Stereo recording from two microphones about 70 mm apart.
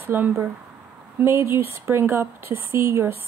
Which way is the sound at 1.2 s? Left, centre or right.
Right.